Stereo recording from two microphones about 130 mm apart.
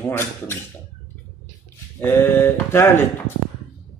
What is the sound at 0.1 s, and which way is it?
Speech, 20° left (ahead or behind).